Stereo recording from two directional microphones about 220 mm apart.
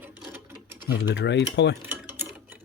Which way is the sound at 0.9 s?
50° left (ahead or behind).